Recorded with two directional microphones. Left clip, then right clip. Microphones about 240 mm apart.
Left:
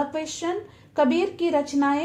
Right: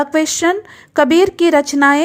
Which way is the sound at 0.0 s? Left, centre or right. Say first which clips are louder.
Right 13 dB; right.